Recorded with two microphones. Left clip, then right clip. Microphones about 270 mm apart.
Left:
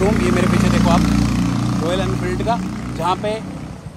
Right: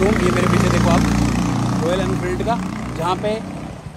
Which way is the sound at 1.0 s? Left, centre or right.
Right.